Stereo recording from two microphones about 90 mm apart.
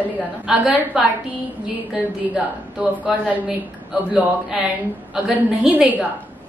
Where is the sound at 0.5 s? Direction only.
5° right (ahead or behind).